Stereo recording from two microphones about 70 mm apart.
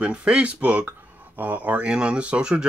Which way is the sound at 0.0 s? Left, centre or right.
Centre.